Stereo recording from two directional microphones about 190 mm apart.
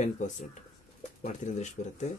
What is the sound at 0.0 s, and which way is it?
Speech, 40° left (ahead or behind).